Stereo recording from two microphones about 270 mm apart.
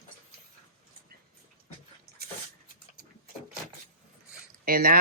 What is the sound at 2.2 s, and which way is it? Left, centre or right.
Dog, right.